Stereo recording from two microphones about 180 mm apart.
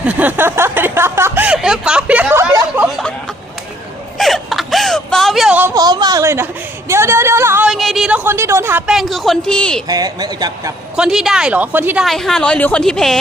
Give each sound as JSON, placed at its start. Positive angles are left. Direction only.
{"t": 0.0, "sound": "a sound", "side_deg": -10}
{"t": 4.2, "sound": "whimper", "side_deg": 0}
{"t": 5.7, "sound": "a sound", "side_deg": -20}
{"t": 7.7, "sound": "a woman's voice", "side_deg": 0}
{"t": 9.8, "sound": "speech", "side_deg": -20}
{"t": 10.9, "sound": "a woman's voice", "side_deg": -5}
{"t": 12.0, "sound": "a woman's voice", "side_deg": 0}